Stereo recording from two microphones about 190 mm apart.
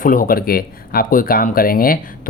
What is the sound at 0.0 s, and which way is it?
Speech, 45° left (ahead or behind).